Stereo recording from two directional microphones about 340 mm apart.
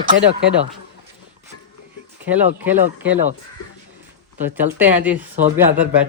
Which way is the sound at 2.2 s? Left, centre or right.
Centre.